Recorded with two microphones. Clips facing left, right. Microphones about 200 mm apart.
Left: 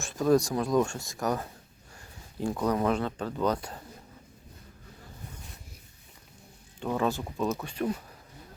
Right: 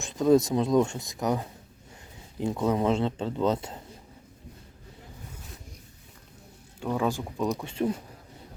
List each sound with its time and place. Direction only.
0.0 s a man's voice: 20° right (ahead or behind)
6.8 s speech: 5° right (ahead or behind); by 8.0 s 25° right (ahead or behind)